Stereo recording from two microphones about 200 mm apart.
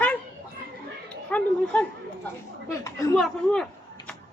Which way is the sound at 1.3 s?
5° left (ahead or behind).